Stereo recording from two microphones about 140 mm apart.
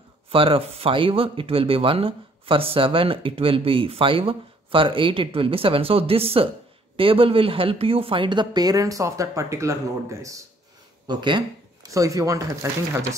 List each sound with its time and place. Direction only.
0.3 s a woman's voice: 40° right (ahead or behind); by 10.4 s 20° right (ahead or behind)
11.1 s speech: 35° right (ahead or behind)